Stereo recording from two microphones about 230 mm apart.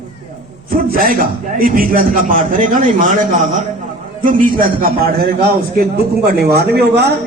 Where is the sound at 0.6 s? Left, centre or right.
Right.